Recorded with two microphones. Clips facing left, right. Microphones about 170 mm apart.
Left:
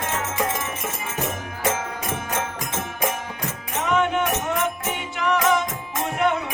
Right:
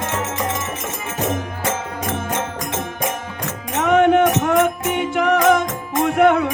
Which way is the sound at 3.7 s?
60° right (ahead or behind).